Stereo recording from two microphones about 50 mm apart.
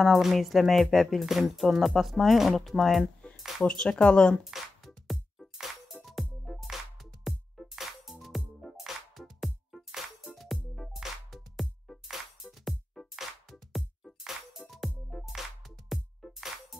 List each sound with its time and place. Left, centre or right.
0.0 s speech: centre
3.6 s speech: centre
4.5 s music: centre
13.1 s music: centre